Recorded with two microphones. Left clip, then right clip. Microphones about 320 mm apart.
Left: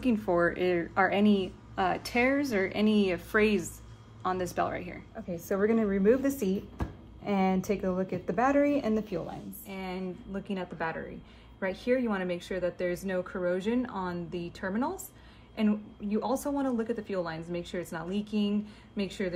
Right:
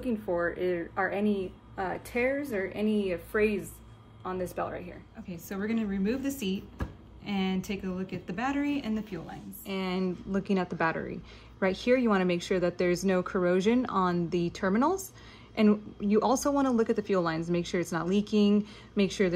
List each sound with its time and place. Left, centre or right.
0.0 s a woman's voice: left
5.3 s speech: centre
6.1 s a woman's voice: centre
6.5 s a sound: centre
7.3 s speech: centre
9.2 s a woman's voice: centre
9.7 s speech: right